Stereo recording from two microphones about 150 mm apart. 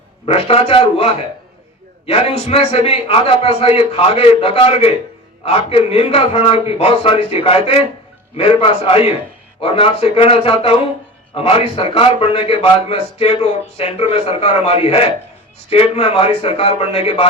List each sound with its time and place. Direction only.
0.3 s a man's voice: 40° left (ahead or behind)